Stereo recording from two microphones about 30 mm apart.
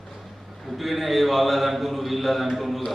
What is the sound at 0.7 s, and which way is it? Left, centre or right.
A man's voice, centre.